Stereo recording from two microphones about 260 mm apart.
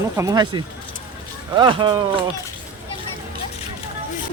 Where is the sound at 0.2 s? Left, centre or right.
Centre.